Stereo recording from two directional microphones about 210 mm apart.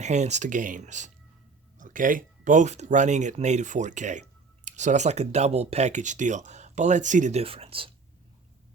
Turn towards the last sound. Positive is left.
turn(degrees=-25)  # may be behind; listen again after turning